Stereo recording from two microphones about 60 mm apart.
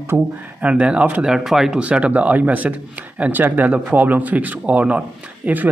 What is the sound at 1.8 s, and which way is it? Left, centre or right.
A man's voice, right.